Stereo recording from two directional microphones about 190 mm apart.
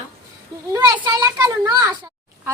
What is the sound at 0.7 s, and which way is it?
A child's voice, 20° right (ahead or behind).